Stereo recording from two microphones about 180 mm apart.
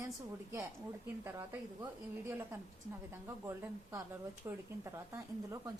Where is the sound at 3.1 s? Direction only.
15° right (ahead or behind).